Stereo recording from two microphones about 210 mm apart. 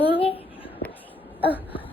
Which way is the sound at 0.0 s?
25° left (ahead or behind).